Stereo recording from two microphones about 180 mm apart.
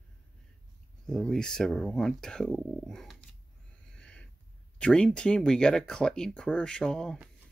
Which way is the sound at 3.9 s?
5° left (ahead or behind).